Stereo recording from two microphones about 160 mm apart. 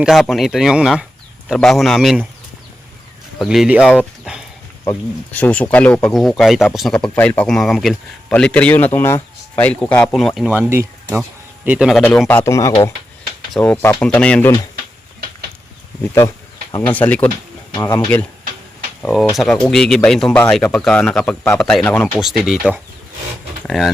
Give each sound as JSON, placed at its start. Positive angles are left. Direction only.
{"t": 0.0, "sound": "speech", "side_deg": 0}
{"t": 3.3, "sound": "speech", "side_deg": 0}
{"t": 4.9, "sound": "speech", "side_deg": 10}
{"t": 10.5, "sound": "speech", "side_deg": -15}
{"t": 12.3, "sound": "speech", "side_deg": 15}
{"t": 16.8, "sound": "speech", "side_deg": 10}
{"t": 17.7, "sound": "speech", "side_deg": 25}
{"t": 19.0, "sound": "speech", "side_deg": 0}
{"t": 22.2, "sound": "speech", "side_deg": 0}
{"t": 23.6, "sound": "speech", "side_deg": 0}